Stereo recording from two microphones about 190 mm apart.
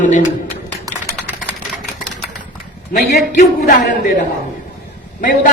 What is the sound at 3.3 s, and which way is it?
Speech, 40° left (ahead or behind).